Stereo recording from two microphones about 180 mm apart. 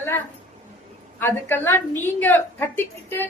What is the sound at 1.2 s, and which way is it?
A woman's voice, 10° left (ahead or behind).